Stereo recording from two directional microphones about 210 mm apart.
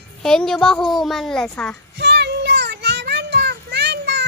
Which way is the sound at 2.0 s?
55° right (ahead or behind).